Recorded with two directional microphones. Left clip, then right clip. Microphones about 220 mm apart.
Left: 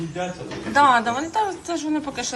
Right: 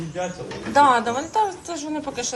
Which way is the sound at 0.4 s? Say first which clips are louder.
Even; 20° right (ahead or behind).